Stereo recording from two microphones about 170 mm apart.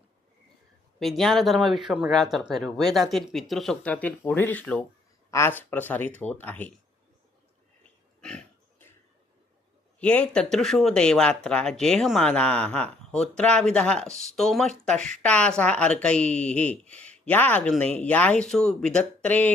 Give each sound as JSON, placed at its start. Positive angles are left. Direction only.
{"t": 0.9, "sound": "speech", "side_deg": 0}
{"t": 8.2, "sound": "pig", "side_deg": 5}
{"t": 10.0, "sound": "speech", "side_deg": 5}